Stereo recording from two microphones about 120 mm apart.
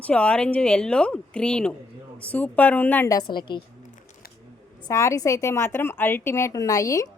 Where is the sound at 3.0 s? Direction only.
35° left (ahead or behind).